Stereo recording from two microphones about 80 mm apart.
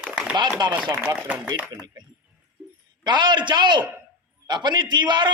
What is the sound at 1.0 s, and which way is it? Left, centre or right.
Speech, centre.